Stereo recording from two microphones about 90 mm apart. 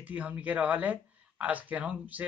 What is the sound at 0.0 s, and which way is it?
Speech, 15° right (ahead or behind).